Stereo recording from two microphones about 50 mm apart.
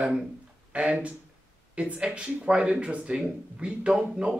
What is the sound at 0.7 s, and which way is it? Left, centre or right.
Speech, right.